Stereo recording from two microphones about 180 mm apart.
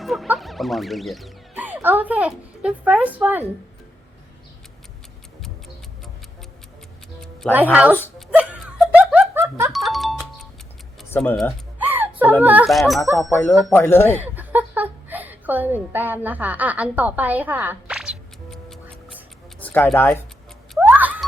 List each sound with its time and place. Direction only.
0.0 s speech: centre (ahead or behind)
7.5 s speech: 10° right (ahead or behind)
8.3 s laughter: 5° right (ahead or behind)
9.3 s music: 15° right (ahead or behind)
9.7 s music: centre (ahead or behind)
11.1 s speech: 5° left (ahead or behind)
11.8 s a sound: 10° right (ahead or behind)
12.4 s speech: 10° right (ahead or behind)
13.3 s speech: 10° left (ahead or behind)
14.2 s a woman's voice: 10° right (ahead or behind)
19.5 s speech: 10° left (ahead or behind)
20.7 s a sound: 10° right (ahead or behind)